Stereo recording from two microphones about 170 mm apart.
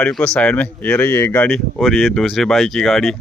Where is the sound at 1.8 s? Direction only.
Centre (ahead or behind).